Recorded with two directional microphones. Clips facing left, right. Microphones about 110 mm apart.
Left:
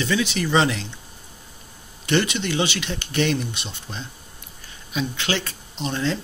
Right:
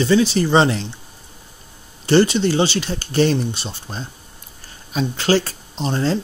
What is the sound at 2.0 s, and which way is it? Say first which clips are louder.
Speech: right 7 dB; 35° right (ahead or behind).